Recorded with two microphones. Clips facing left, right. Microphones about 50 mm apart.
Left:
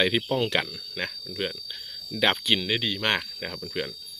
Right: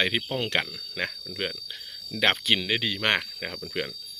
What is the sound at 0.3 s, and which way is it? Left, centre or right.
Speech, right.